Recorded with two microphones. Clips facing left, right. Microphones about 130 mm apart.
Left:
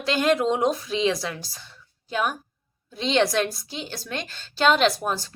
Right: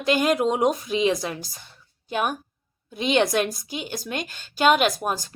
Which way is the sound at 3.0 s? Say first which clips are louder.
Right 1 dB; 15° right (ahead or behind).